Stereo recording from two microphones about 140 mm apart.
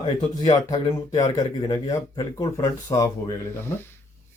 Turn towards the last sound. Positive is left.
turn(degrees=15)  # may be behind; listen again after turning